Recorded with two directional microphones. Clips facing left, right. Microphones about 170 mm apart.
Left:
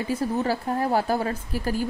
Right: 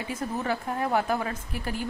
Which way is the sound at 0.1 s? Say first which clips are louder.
Left 5 dB; 35° left (ahead or behind).